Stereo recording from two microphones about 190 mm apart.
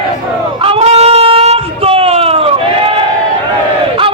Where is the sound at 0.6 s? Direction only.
30° right (ahead or behind).